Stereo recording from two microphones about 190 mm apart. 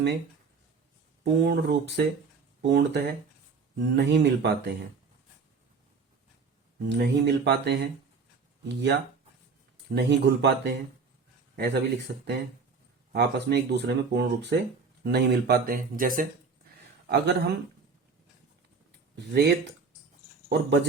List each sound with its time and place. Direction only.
1.2 s speech: 60° right (ahead or behind)
6.8 s speech: 65° right (ahead or behind); by 16.2 s 45° right (ahead or behind)
17.1 s speech: 65° right (ahead or behind)
19.1 s speech: 60° right (ahead or behind)